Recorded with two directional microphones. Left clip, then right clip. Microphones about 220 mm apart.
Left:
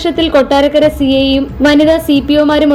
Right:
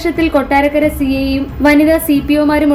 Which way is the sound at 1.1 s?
25° left (ahead or behind).